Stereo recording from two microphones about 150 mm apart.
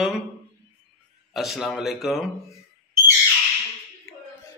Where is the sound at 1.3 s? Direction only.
Centre (ahead or behind).